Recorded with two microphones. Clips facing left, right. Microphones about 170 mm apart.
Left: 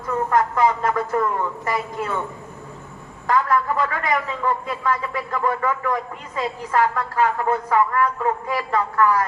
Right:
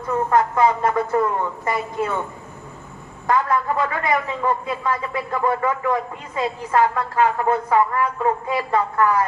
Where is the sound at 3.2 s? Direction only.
20° right (ahead or behind).